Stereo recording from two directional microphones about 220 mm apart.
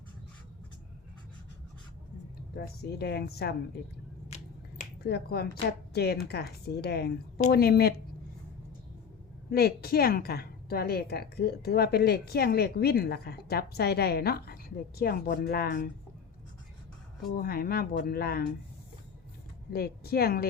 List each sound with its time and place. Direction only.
2.6 s a woman's voice: 45° left (ahead or behind)
5.0 s a woman's voice: 45° left (ahead or behind)
9.5 s a woman's voice: 45° left (ahead or behind)
17.2 s a woman's voice: 40° left (ahead or behind)
19.7 s a woman's voice: 45° left (ahead or behind)